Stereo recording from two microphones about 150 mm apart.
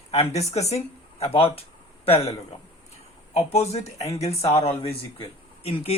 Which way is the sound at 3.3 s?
45° left (ahead or behind).